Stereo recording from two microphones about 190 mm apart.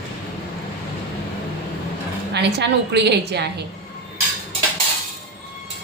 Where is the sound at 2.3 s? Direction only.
60° right (ahead or behind).